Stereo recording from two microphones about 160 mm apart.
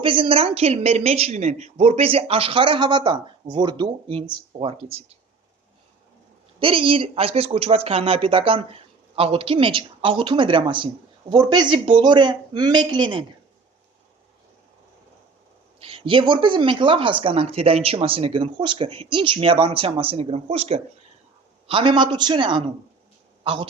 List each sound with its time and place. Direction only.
0.0 s a woman's voice: 35° right (ahead or behind)
6.6 s a woman's voice: 35° right (ahead or behind)
15.8 s a woman's voice: 35° right (ahead or behind)